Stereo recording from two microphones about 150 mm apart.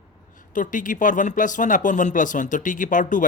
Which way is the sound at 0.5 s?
60° left (ahead or behind).